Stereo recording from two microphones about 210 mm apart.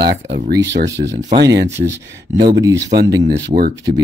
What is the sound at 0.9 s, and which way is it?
Speech, 55° right (ahead or behind).